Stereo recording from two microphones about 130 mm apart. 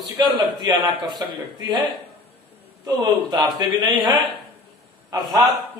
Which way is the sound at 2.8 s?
30° right (ahead or behind).